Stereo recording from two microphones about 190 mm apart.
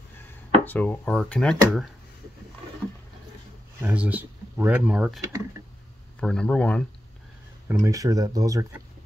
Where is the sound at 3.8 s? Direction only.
5° right (ahead or behind).